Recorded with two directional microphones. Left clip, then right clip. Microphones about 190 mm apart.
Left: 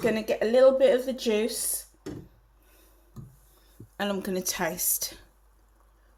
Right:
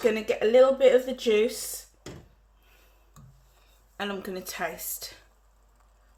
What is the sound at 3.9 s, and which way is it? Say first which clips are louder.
Speech: left 3 dB; 45° left (ahead or behind).